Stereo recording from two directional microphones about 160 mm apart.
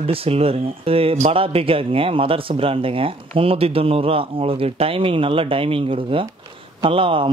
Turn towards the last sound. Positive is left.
turn(degrees=-35)  # may be behind; listen again after turning